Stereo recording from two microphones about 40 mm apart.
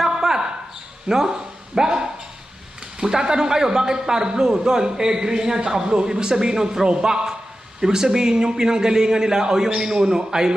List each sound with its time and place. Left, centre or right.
0.0 s basketball bounce: centre
1.0 s a man's voice: centre